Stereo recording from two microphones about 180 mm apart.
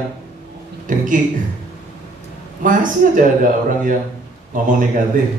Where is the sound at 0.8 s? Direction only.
45° right (ahead or behind).